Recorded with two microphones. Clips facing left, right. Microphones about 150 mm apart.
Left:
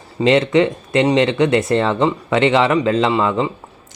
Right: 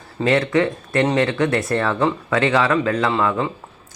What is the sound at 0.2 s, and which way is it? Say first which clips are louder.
Speech: left 4 dB; 20° left (ahead or behind).